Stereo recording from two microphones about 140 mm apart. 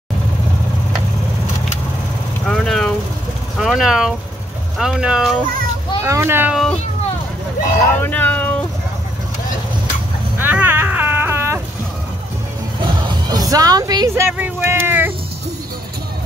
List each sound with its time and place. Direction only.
2.4 s vehicle: 5° left (ahead or behind)
3.5 s speech: centre (ahead or behind)
6.0 s speech: 20° right (ahead or behind)
6.5 s speech: 5° left (ahead or behind)
8.0 s a sound: 10° left (ahead or behind)
10.3 s cat: 15° right (ahead or behind)
12.8 s music: 30° right (ahead or behind)
14.3 s vehicle: 15° right (ahead or behind)